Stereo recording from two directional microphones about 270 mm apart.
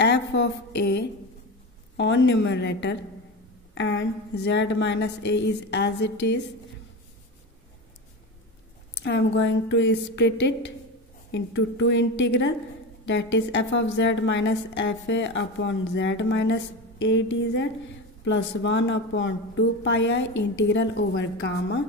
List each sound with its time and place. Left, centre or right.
0.0 s a woman's voice: left
9.0 s a woman's voice: left
20.2 s a woman's voice: left
20.6 s a woman's voice: left